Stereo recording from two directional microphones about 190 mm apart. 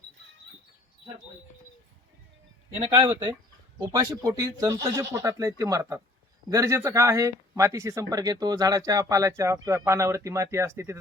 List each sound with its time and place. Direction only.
2.7 s speech: 25° right (ahead or behind)